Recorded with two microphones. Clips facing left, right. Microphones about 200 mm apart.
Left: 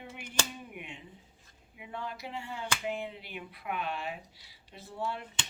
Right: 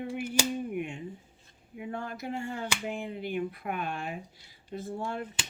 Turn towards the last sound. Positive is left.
turn(degrees=-50)  # may be behind; listen again after turning